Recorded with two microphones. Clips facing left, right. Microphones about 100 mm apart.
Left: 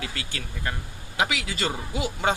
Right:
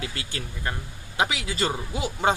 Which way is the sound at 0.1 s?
35° right (ahead or behind).